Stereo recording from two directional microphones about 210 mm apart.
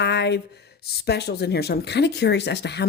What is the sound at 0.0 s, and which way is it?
Speech, 55° left (ahead or behind).